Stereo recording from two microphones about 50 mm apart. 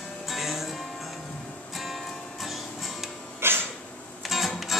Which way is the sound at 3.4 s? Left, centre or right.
Right.